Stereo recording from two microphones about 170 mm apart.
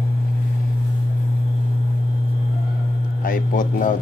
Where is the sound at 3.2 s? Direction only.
50° left (ahead or behind).